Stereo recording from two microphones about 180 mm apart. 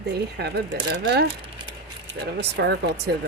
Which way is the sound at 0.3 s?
65° right (ahead or behind).